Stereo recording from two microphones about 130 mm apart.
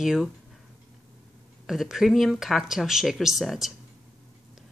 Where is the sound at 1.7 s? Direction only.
Centre (ahead or behind).